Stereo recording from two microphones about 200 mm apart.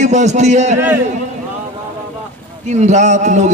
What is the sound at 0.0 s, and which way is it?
Speech, 35° right (ahead or behind).